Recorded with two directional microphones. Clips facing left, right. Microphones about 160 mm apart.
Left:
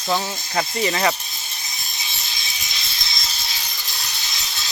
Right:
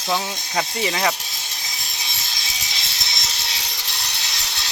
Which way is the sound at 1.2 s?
90° right.